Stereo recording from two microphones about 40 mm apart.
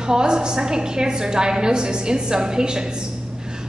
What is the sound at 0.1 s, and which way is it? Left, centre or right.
A woman's voice, centre.